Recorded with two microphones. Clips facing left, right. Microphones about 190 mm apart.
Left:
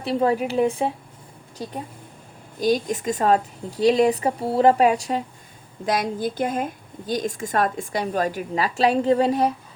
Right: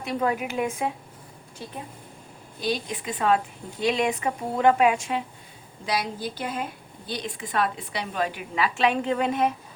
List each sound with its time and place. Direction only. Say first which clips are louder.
0.0 s speech: left 5 dB; 30° left (ahead or behind)
2.6 s speech: left 7 dB; 45° left (ahead or behind)
5.8 s a woman's voice: left 5 dB; 50° left (ahead or behind)